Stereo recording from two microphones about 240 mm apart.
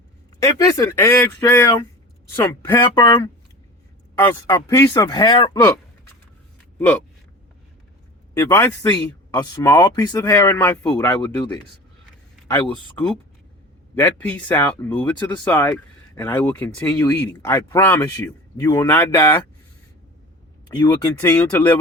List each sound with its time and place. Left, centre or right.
0.3 s speech: centre
8.4 s speech: centre
13.9 s speech: centre
20.8 s speech: centre